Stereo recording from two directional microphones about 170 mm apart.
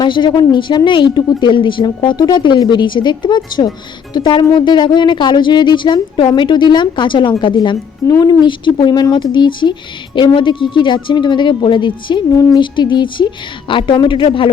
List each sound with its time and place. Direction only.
0.0 s speech: 25° left (ahead or behind)